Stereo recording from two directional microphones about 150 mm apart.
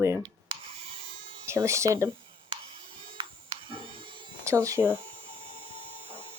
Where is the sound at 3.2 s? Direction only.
35° right (ahead or behind).